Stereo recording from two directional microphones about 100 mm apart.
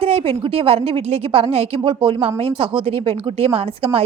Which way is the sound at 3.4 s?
75° right (ahead or behind).